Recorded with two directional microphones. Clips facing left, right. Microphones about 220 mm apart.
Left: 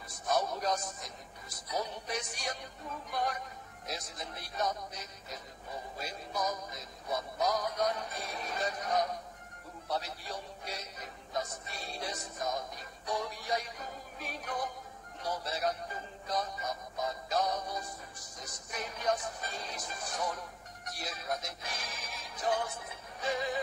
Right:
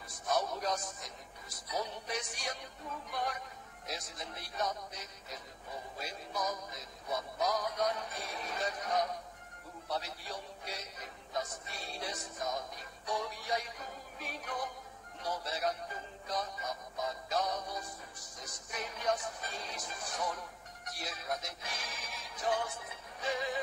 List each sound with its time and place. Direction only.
0.3 s speech: 40° left (ahead or behind)